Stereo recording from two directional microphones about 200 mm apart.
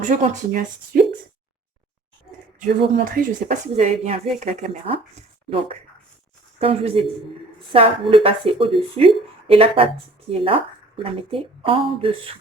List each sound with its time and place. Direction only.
0.0 s speech: 35° right (ahead or behind)
2.6 s speech: 45° right (ahead or behind)
6.6 s speech: 30° right (ahead or behind)